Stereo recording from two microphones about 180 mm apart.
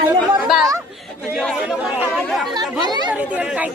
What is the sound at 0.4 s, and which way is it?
Chatter, centre (ahead or behind).